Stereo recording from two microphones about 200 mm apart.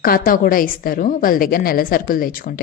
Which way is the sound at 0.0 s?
45° left (ahead or behind).